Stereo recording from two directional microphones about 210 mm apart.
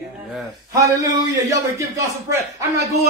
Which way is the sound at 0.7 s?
15° right (ahead or behind).